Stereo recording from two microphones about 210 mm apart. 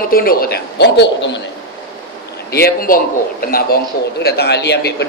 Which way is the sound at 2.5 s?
45° left (ahead or behind).